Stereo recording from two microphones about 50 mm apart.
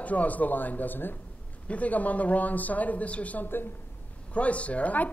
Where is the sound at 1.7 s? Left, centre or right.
Left.